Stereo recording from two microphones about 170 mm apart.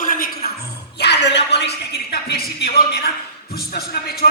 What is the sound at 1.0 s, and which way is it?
A woman's voice, 85° left.